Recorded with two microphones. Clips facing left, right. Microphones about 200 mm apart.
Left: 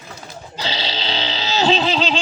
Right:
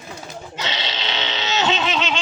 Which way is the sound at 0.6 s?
30° left (ahead or behind).